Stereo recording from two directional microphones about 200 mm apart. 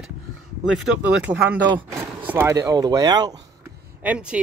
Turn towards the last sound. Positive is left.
turn(degrees=-5)  # may be behind; listen again after turning